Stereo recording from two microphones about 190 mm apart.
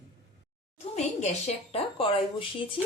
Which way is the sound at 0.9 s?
35° left (ahead or behind).